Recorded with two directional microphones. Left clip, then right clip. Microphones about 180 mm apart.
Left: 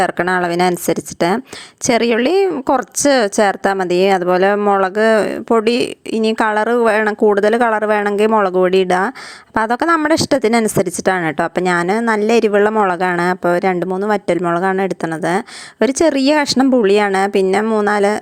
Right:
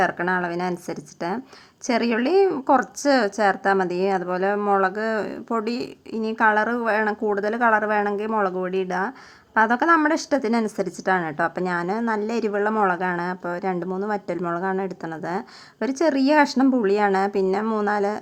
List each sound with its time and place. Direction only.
0.0 s a woman's voice: 40° left (ahead or behind)